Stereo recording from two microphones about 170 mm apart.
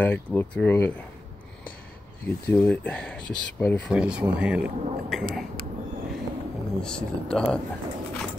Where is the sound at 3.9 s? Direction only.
5° right (ahead or behind).